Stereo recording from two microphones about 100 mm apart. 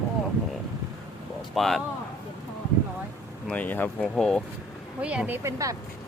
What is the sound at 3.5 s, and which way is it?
Speech, 15° left (ahead or behind).